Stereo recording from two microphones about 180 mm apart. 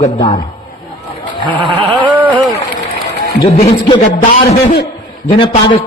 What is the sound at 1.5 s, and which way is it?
Bleat, 25° right (ahead or behind).